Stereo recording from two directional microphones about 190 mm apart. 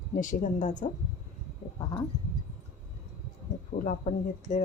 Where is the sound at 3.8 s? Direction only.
40° left (ahead or behind).